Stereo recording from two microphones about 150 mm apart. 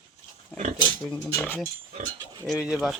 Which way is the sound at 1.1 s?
15° left (ahead or behind).